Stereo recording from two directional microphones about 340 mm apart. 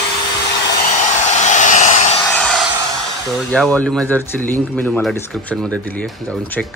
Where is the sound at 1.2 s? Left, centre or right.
Left.